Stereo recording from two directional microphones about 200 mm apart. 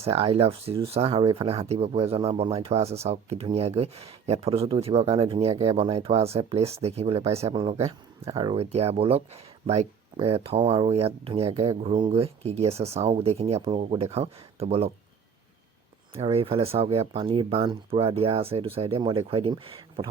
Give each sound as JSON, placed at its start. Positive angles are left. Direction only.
{"t": 0.0, "sound": "speech", "side_deg": -30}
{"t": 16.1, "sound": "speech", "side_deg": -30}